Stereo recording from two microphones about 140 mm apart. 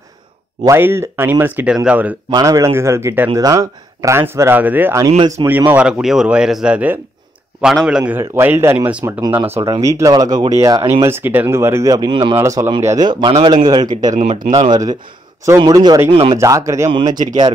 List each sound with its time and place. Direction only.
0.7 s speech: 15° right (ahead or behind)
2.3 s speech: 25° right (ahead or behind)
12.4 s speech: 20° right (ahead or behind)
14.1 s speech: 50° right (ahead or behind)
14.7 s speech: 30° right (ahead or behind)
17.1 s speech: 65° right (ahead or behind)